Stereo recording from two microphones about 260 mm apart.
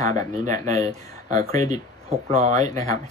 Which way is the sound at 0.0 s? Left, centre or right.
Centre.